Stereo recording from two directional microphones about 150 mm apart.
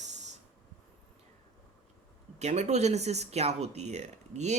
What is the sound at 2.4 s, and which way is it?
Speech, 50° right (ahead or behind).